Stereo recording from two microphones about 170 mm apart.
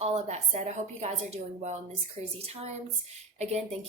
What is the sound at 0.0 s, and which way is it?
A woman's voice, 40° right (ahead or behind).